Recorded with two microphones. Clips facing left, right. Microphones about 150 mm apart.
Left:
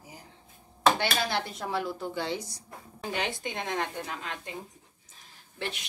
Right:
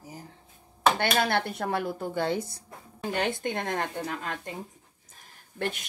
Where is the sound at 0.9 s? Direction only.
55° right (ahead or behind).